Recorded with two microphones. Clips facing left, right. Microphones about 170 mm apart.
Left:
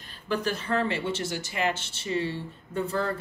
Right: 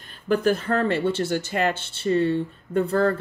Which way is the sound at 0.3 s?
55° right (ahead or behind).